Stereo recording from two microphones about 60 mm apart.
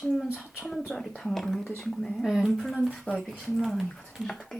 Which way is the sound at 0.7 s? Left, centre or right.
Centre.